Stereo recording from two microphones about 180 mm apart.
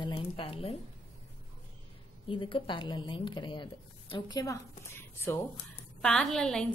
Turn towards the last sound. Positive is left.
turn(degrees=5)  # may be behind; listen again after turning